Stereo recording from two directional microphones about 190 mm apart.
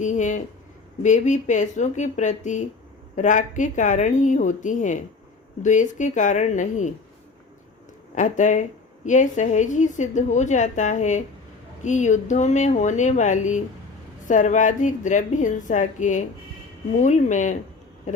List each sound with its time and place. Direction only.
0.0 s a woman's voice: 40° left (ahead or behind)
8.1 s a woman's voice: 40° left (ahead or behind)